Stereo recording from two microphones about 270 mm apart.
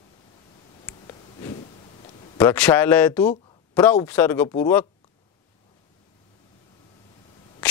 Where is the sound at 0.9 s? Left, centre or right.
Centre.